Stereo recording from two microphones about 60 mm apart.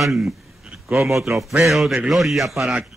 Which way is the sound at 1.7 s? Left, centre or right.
Centre.